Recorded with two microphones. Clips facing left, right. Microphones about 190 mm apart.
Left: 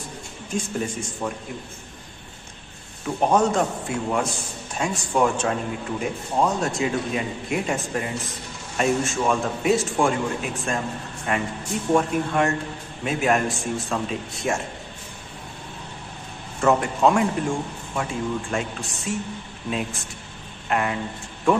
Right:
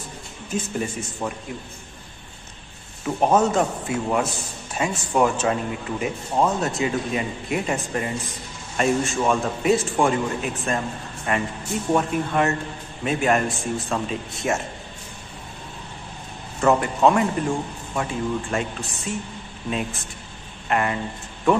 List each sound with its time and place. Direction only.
0.5 s speech: 5° right (ahead or behind)
3.3 s speech: 5° right (ahead or behind)
16.6 s speech: centre (ahead or behind)